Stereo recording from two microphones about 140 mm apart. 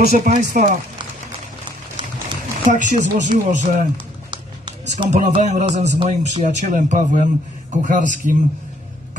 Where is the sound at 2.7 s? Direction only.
65° left (ahead or behind).